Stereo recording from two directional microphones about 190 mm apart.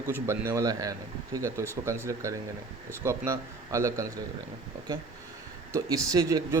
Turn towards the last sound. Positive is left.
turn(degrees=-20)  # may be behind; listen again after turning